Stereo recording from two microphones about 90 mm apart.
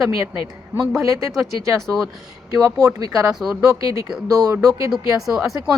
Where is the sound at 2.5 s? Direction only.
40° right (ahead or behind).